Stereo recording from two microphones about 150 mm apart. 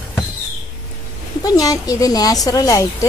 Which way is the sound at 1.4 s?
25° left (ahead or behind).